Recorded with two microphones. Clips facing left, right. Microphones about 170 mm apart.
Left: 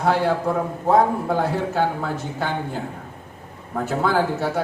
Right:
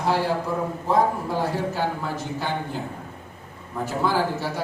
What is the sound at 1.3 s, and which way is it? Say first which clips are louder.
Speech: left 3 dB; 55° left (ahead or behind).